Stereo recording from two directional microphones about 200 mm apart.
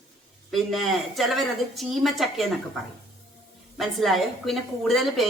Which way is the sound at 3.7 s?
Centre (ahead or behind).